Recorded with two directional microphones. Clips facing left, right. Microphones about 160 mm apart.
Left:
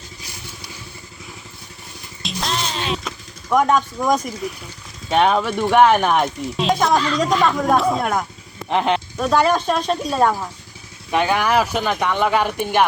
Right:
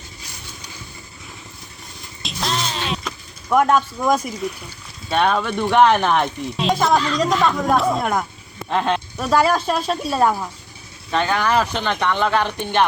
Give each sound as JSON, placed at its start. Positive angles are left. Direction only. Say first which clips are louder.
{"t": 2.2, "sound": "music", "louder": "even", "side_deg": 0}
{"t": 5.0, "sound": "speech", "louder": "left 2 dB", "side_deg": 15}
{"t": 8.7, "sound": "speech", "louder": "left 2 dB", "side_deg": 15}
{"t": 9.1, "sound": "speech", "louder": "even", "side_deg": 0}
{"t": 11.1, "sound": "speech", "louder": "left 1 dB", "side_deg": 15}